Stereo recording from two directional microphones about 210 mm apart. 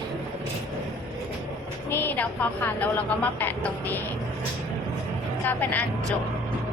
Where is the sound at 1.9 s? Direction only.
10° left (ahead or behind).